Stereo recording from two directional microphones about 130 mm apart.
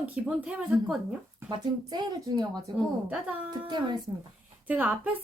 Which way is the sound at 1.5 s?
35° right (ahead or behind).